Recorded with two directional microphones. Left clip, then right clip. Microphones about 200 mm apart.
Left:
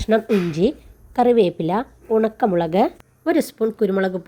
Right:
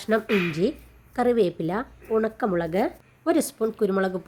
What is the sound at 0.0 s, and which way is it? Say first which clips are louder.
Speech: left 4 dB; 10° left (ahead or behind).